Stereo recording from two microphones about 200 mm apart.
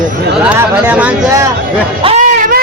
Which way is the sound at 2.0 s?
35° right (ahead or behind).